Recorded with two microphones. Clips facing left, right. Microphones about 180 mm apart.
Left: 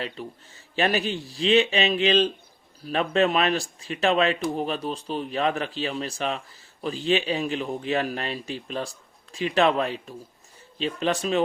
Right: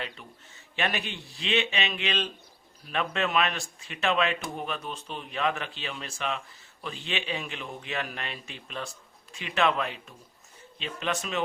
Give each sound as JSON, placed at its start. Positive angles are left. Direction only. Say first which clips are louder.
{"t": 0.0, "sound": "speech", "louder": "left 6 dB", "side_deg": 35}